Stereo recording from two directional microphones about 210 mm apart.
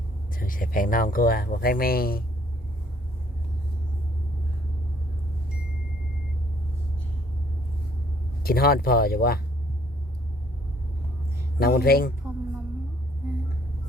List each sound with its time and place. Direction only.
0.3 s speech: 40° left (ahead or behind)
8.4 s speech: 45° left (ahead or behind)
11.6 s speech: 45° left (ahead or behind)